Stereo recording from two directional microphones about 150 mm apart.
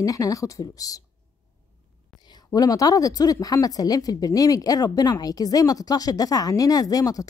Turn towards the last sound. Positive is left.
turn(degrees=25)  # may be behind; listen again after turning